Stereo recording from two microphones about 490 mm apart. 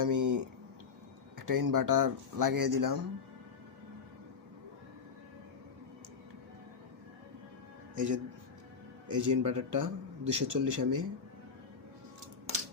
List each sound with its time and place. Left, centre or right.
0.0 s speech: right
7.9 s speech: right